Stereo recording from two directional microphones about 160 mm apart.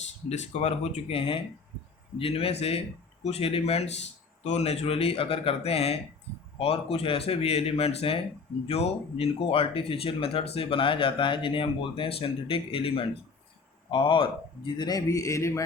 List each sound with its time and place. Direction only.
0.3 s a man's voice: 40° left (ahead or behind); by 15.6 s 20° left (ahead or behind)